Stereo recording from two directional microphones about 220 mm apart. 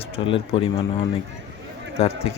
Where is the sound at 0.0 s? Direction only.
25° left (ahead or behind).